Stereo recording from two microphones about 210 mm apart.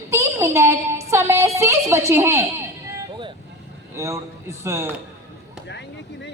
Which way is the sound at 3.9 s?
15° right (ahead or behind).